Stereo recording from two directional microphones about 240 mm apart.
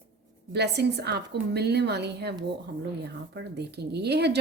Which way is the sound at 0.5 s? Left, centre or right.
Right.